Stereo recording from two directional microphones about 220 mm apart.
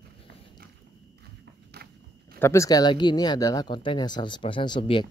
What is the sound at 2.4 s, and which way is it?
Speech, 15° left (ahead or behind).